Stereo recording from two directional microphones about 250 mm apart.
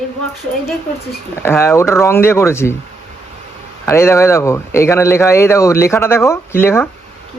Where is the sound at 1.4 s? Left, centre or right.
Centre.